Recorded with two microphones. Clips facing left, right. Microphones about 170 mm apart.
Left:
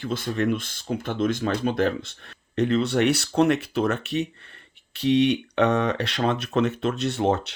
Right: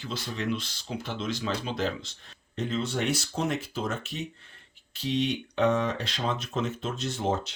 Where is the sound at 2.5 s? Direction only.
70° left (ahead or behind).